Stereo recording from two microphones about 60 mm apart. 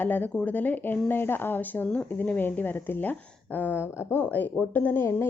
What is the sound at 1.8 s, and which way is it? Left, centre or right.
Speech, left.